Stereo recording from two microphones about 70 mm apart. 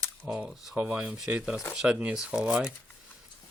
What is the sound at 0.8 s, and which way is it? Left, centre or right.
Speech, right.